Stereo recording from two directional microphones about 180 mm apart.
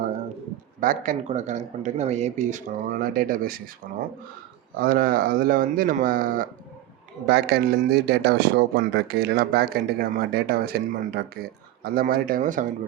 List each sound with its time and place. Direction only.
0.8 s speech: 50° right (ahead or behind)
4.8 s speech: 55° right (ahead or behind)
7.3 s speech: 65° right (ahead or behind); by 12.6 s 45° right (ahead or behind)